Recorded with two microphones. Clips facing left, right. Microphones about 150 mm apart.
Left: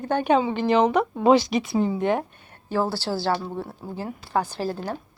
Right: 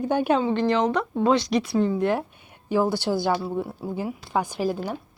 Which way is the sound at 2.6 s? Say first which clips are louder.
Right 3 dB; 15° right (ahead or behind).